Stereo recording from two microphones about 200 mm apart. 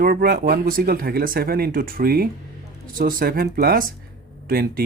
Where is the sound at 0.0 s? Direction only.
50° right (ahead or behind).